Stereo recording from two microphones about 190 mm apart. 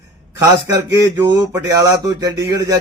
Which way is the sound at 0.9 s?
15° right (ahead or behind).